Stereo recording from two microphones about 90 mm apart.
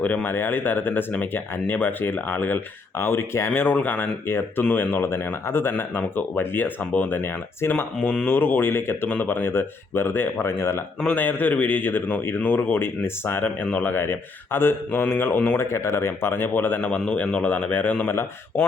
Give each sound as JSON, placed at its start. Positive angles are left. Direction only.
{"t": 0.0, "sound": "speech", "side_deg": 20}